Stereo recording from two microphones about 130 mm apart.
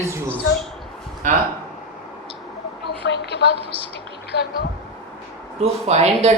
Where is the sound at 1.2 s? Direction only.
90° right.